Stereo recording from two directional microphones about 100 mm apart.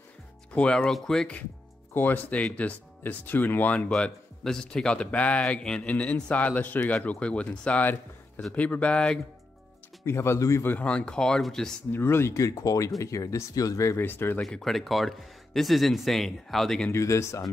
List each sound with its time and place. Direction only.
0.6 s speech: 10° left (ahead or behind)
3.9 s speech: 5° left (ahead or behind)
10.0 s speech: 25° left (ahead or behind); by 11.7 s 5° left (ahead or behind)
11.9 s speech: 25° left (ahead or behind)
14.0 s speech: 20° left (ahead or behind)
14.4 s speech: 5° left (ahead or behind)
16.9 s speech: 30° left (ahead or behind)